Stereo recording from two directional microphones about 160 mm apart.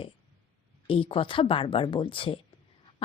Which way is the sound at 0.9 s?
35° left (ahead or behind).